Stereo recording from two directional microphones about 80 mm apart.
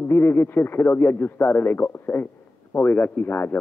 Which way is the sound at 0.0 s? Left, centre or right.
Left.